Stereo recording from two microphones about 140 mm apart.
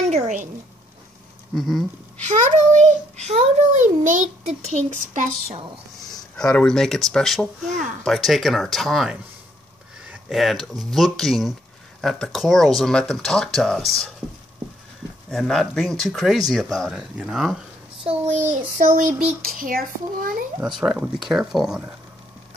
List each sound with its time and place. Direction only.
1.5 s speech: centre (ahead or behind)
2.3 s a child's voice: 60° right (ahead or behind)
6.3 s speech: 5° left (ahead or behind)
10.3 s speech: centre (ahead or behind)
15.2 s speech: centre (ahead or behind)
18.0 s a child's voice: 55° right (ahead or behind)
18.8 s a sound: 65° right (ahead or behind); by 19.8 s 90° right
20.6 s speech: 5° right (ahead or behind)